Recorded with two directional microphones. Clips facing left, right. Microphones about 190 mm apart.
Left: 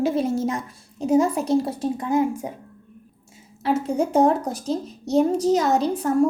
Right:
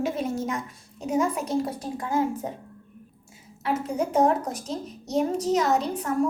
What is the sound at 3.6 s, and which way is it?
A woman's voice, 30° left (ahead or behind).